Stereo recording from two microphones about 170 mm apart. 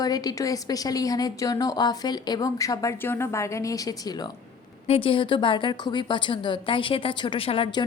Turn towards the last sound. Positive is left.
turn(degrees=30)  # may be behind; listen again after turning